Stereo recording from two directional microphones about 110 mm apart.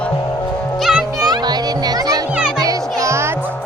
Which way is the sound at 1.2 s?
35° right (ahead or behind).